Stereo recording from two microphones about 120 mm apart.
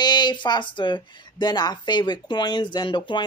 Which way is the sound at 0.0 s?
35° left (ahead or behind).